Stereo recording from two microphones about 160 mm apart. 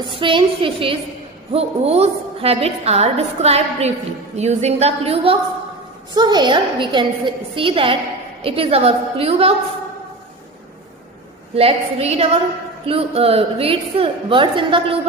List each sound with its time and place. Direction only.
0.1 s a woman's voice: 30° right (ahead or behind)
11.5 s a woman's voice: 40° right (ahead or behind)